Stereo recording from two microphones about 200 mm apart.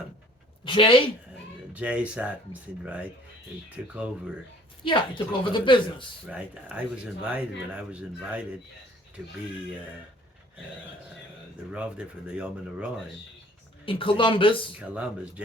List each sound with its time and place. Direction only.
0.6 s a woman's voice: 25° left (ahead or behind)
1.7 s speech: 5° right (ahead or behind)
4.8 s a woman's voice: 25° left (ahead or behind)
6.2 s speech: 5° right (ahead or behind)
11.7 s speech: 5° right (ahead or behind)
13.8 s a woman's voice: 25° left (ahead or behind)
14.8 s speech: 5° right (ahead or behind)